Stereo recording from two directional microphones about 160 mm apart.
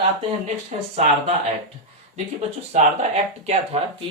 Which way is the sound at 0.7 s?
45° right (ahead or behind).